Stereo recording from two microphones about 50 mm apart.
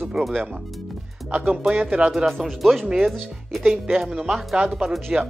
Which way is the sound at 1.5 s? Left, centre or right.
Centre.